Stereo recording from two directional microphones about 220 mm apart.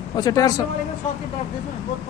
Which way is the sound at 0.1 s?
15° left (ahead or behind).